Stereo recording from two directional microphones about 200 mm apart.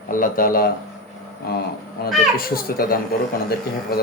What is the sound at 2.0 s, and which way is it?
Speech, 50° left (ahead or behind).